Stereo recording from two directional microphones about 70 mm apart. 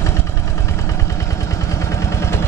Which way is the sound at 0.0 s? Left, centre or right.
Left.